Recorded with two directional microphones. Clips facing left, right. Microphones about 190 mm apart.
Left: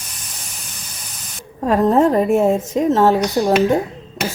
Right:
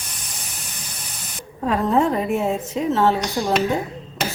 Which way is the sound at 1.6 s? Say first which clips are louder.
Left 5 dB; 45° left (ahead or behind).